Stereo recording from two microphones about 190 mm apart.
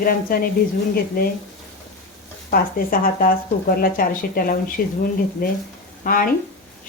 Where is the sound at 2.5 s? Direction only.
50° left (ahead or behind).